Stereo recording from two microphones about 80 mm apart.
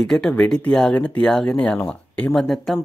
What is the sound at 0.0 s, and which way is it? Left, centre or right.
Speech, centre.